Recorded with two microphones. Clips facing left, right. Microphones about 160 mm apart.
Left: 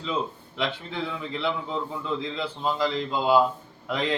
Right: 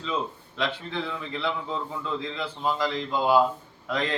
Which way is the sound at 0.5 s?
20° left (ahead or behind).